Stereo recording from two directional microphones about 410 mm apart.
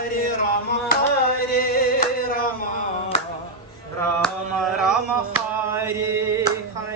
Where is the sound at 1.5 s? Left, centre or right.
Left.